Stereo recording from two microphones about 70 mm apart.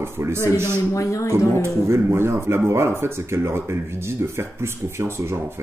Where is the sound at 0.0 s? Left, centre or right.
Right.